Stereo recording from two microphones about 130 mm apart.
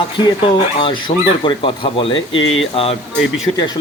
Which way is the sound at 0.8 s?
40° left (ahead or behind).